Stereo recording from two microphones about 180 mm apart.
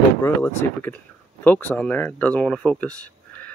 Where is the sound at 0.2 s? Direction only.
10° left (ahead or behind).